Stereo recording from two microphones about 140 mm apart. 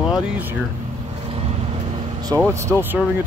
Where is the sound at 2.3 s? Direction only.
30° right (ahead or behind).